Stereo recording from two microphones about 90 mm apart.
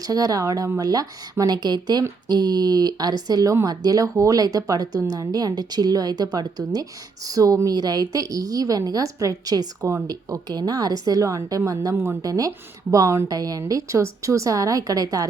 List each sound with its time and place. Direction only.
0.1 s a woman's voice: 45° right (ahead or behind)